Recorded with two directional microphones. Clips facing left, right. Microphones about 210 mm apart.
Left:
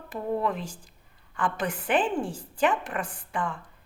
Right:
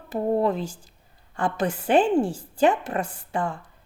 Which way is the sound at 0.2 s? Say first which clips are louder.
Right 6 dB; 35° right (ahead or behind).